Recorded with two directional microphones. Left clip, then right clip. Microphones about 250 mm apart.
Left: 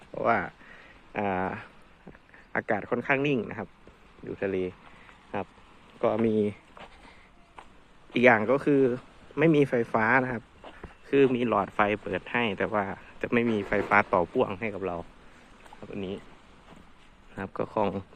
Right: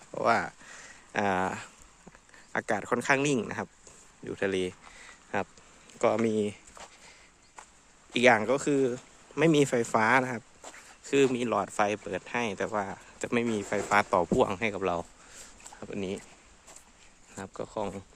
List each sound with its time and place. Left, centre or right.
0.1 s a sound: right
2.5 s speech: centre
6.0 s a sound: right
8.1 s speech: centre
14.3 s speech: right
17.3 s speech: centre